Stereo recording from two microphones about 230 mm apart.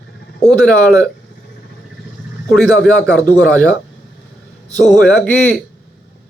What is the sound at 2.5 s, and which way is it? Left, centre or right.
A man's voice, centre.